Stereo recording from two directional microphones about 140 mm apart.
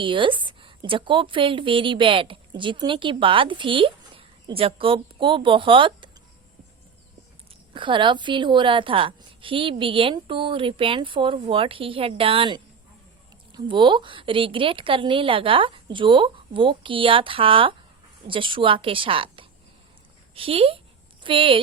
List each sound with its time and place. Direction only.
0.0 s a woman's voice: 35° right (ahead or behind)
7.7 s a woman's voice: 35° right (ahead or behind)